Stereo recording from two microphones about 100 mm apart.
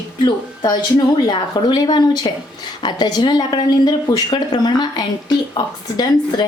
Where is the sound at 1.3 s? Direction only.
45° left (ahead or behind).